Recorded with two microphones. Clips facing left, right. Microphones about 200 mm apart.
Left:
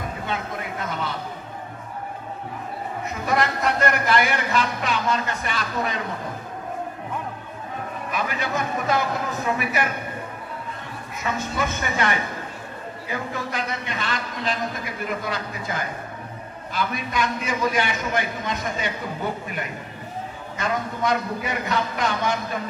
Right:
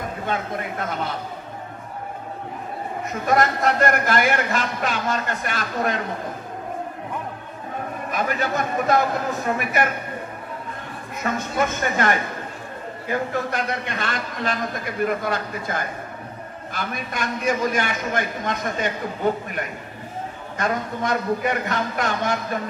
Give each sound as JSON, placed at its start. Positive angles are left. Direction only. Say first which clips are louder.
{"t": 0.3, "sound": "a man's voice", "louder": "right 5 dB", "side_deg": -45}
{"t": 3.3, "sound": "a man's voice", "louder": "right 3 dB", "side_deg": -45}
{"t": 8.1, "sound": "a man's voice", "louder": "right 3 dB", "side_deg": -45}
{"t": 11.2, "sound": "a man's voice", "louder": "right 3 dB", "side_deg": -45}
{"t": 20.5, "sound": "a man's voice", "louder": "right 2 dB", "side_deg": -45}